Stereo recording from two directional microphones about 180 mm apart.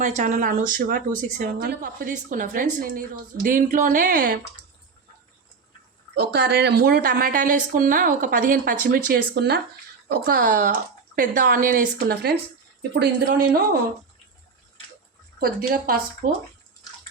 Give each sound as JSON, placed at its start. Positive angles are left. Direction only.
{"t": 0.0, "sound": "speech", "side_deg": -45}
{"t": 6.1, "sound": "speech", "side_deg": -65}
{"t": 15.4, "sound": "speech", "side_deg": -55}